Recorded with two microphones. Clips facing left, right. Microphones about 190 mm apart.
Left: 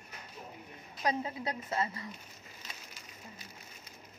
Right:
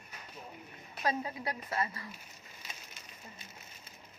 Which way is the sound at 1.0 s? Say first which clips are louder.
Left 1 dB; 20° left (ahead or behind).